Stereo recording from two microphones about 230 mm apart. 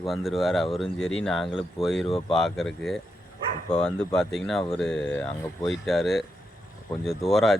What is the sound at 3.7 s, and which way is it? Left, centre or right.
Speech, left.